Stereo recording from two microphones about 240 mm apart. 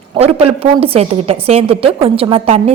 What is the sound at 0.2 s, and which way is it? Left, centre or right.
A woman's voice, right.